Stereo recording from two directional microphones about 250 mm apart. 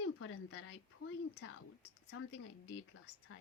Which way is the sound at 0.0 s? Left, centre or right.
Left.